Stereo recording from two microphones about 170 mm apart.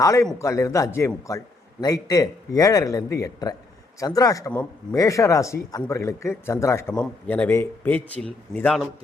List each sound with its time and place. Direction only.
0.0 s a man's voice: 20° left (ahead or behind)